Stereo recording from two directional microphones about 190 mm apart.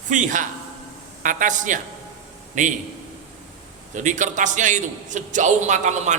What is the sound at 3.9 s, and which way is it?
A woman's voice, 40° right (ahead or behind).